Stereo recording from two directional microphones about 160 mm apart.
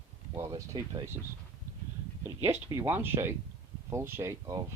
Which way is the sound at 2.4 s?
15° right (ahead or behind).